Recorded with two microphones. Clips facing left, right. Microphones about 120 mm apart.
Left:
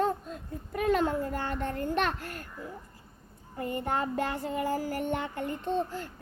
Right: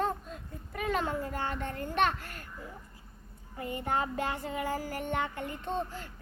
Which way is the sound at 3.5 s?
45° left (ahead or behind).